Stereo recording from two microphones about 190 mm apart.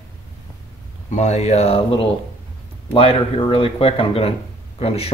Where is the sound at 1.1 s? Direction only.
35° left (ahead or behind).